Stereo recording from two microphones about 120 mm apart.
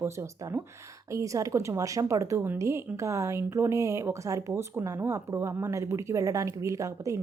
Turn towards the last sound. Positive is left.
turn(degrees=-25)  # may be behind; listen again after turning